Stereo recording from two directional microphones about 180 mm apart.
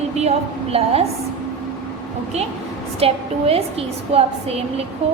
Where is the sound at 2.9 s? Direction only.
35° right (ahead or behind).